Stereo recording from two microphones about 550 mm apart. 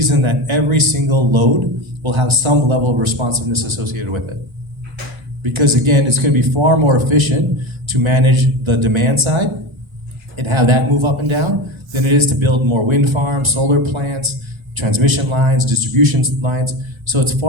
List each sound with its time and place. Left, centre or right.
0.0 s a man's voice: right
5.4 s a man's voice: right